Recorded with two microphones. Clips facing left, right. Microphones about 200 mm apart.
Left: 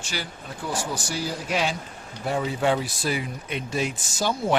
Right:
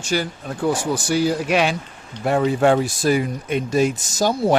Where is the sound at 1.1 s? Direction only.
65° right (ahead or behind); by 4.5 s 40° right (ahead or behind).